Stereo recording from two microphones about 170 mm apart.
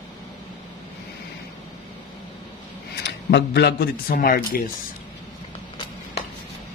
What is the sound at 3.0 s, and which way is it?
Speech, 80° left.